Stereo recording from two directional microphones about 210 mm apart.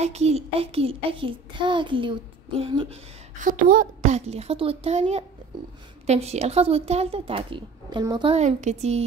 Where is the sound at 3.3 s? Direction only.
40° right (ahead or behind).